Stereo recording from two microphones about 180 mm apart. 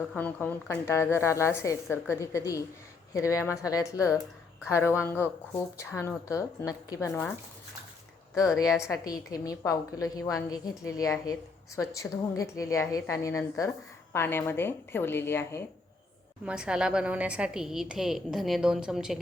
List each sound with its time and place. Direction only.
0.1 s a woman's voice: 10° left (ahead or behind)
8.4 s a woman's voice: 20° left (ahead or behind)
16.5 s a woman's voice: 5° right (ahead or behind)